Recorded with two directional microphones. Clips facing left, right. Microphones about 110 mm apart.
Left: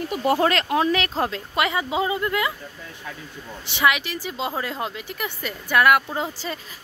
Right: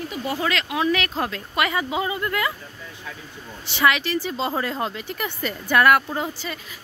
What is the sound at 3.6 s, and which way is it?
A woman's voice, 15° left (ahead or behind).